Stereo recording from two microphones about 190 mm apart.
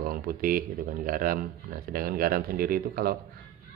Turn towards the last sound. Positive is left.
turn(degrees=-50)  # may be behind; listen again after turning